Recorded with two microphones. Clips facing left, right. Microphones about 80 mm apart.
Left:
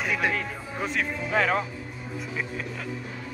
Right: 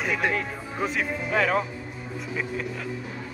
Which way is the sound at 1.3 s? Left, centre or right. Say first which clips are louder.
Right 1 dB; left.